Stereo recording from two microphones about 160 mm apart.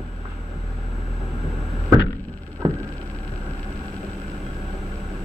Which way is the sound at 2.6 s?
25° right (ahead or behind).